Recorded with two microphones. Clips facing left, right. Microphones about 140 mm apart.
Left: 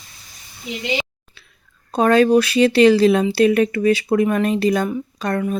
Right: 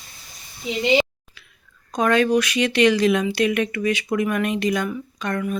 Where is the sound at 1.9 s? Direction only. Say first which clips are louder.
Left 5 dB; 35° left (ahead or behind).